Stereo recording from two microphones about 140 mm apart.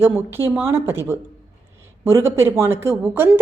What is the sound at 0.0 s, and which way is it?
A woman's voice, 15° right (ahead or behind).